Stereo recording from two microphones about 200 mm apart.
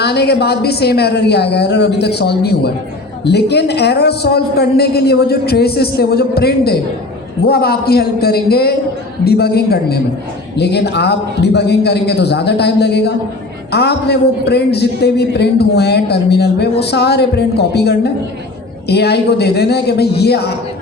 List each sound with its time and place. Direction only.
0.0 s a man's voice: 55° left (ahead or behind)